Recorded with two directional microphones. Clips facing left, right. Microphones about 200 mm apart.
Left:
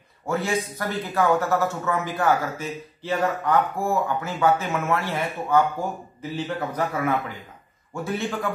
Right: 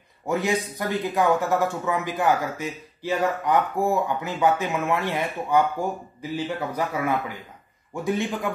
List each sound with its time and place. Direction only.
0.3 s a man's voice: 15° right (ahead or behind)